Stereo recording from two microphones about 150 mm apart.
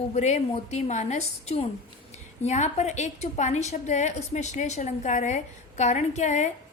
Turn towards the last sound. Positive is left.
turn(degrees=55)  # may be behind; listen again after turning